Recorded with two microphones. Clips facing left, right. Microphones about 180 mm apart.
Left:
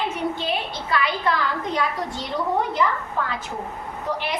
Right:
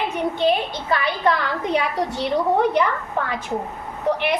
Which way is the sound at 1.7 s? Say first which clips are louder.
Right 4 dB; 70° right (ahead or behind).